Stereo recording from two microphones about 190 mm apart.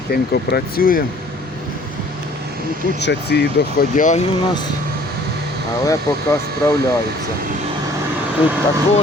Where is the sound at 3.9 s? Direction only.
40° left (ahead or behind).